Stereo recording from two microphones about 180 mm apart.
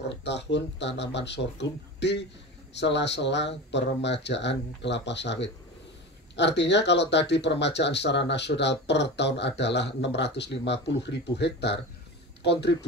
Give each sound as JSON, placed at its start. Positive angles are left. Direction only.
{"t": 0.1, "sound": "speech", "side_deg": 75}